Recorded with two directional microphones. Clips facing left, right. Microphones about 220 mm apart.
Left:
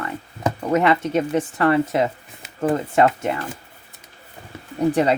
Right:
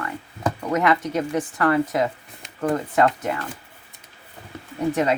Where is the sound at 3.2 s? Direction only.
25° left (ahead or behind).